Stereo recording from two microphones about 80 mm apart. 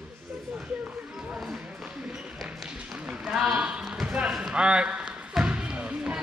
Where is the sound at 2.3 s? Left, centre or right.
Centre.